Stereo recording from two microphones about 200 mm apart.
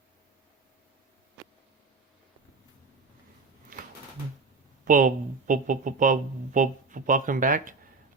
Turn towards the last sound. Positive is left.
turn(degrees=-40)  # may be behind; listen again after turning